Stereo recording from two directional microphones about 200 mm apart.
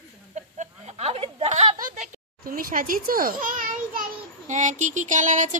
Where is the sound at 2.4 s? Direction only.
45° right (ahead or behind).